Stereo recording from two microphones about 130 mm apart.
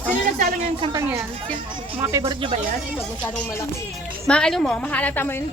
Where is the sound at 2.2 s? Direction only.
40° right (ahead or behind).